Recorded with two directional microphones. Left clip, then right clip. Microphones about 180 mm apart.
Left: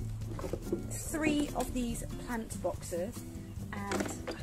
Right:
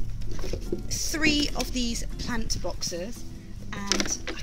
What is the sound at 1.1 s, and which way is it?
A woman's voice, 15° right (ahead or behind).